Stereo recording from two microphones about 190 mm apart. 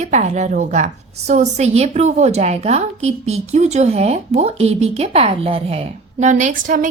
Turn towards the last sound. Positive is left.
turn(degrees=-45)  # may be behind; listen again after turning